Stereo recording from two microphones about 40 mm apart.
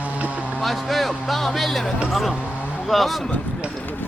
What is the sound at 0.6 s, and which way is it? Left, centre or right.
Speech, centre.